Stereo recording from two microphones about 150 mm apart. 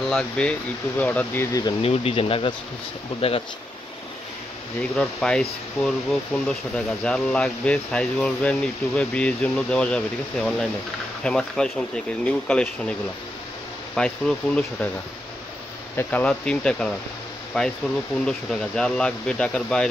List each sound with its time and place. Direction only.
0.1 s speech: 5° left (ahead or behind)
1.8 s speech: 40° left (ahead or behind)
4.9 s speech: 5° left (ahead or behind)
13.9 s speech: 5° left (ahead or behind)
16.0 s speech: 10° left (ahead or behind)